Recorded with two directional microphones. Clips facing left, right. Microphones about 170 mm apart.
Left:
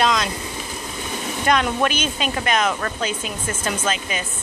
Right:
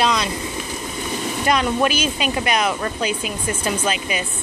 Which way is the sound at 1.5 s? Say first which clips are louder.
Right 1 dB; 5° right (ahead or behind).